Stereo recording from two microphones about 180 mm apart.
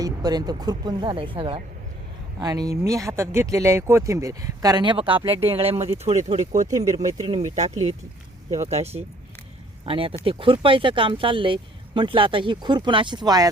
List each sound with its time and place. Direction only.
0.0 s speech: 20° right (ahead or behind); by 6.7 s 40° right (ahead or behind)
7.0 s speech: 20° right (ahead or behind)
7.3 s speech: 40° right (ahead or behind)
8.4 s speech: 20° right (ahead or behind)
8.7 s speech: 35° right (ahead or behind)